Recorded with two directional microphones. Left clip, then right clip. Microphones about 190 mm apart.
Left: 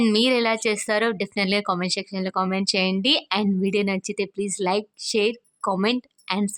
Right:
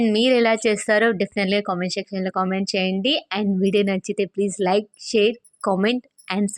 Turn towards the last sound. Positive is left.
turn(degrees=-15)  # may be behind; listen again after turning